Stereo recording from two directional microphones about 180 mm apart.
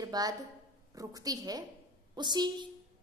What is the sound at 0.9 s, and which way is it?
A woman's voice, 20° right (ahead or behind).